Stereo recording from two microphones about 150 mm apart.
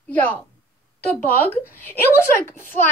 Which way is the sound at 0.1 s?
10° left (ahead or behind).